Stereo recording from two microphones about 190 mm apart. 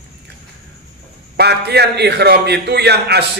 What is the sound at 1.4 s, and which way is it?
A man's voice, 60° right (ahead or behind).